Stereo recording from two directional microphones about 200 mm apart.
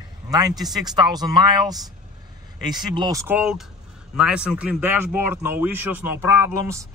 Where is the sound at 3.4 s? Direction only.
5° right (ahead or behind).